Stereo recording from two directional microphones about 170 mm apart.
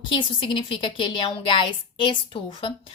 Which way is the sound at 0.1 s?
30° left (ahead or behind).